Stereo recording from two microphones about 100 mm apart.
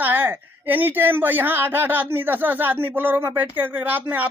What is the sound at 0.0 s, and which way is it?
A man's voice, 20° right (ahead or behind).